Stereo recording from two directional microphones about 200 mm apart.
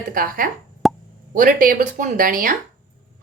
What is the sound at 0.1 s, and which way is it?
Speech, 45° right (ahead or behind).